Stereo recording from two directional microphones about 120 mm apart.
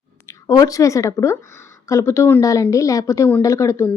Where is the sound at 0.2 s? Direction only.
25° left (ahead or behind).